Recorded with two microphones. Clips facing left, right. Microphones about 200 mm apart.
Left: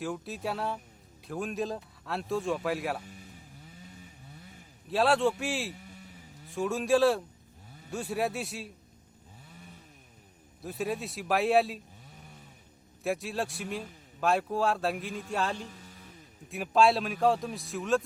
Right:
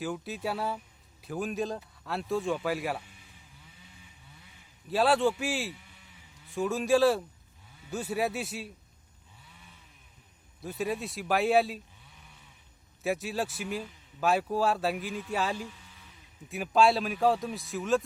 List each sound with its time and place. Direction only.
0.0 s a man's voice: centre (ahead or behind)
3.0 s a sound: 40° left (ahead or behind)
4.9 s a man's voice: centre (ahead or behind)
5.7 s a sound: 40° left (ahead or behind)
6.5 s a man's voice: centre (ahead or behind)
9.5 s chainsaw: 45° left (ahead or behind)
10.6 s a man's voice: centre (ahead or behind)
12.0 s a sound: 40° left (ahead or behind)
13.0 s a man's voice: centre (ahead or behind)
15.5 s music: 40° left (ahead or behind)
16.5 s a man's voice: centre (ahead or behind)